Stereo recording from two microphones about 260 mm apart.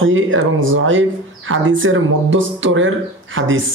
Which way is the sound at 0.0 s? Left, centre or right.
Right.